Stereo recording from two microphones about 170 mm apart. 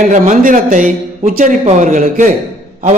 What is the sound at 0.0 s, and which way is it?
A man's voice, 50° right (ahead or behind).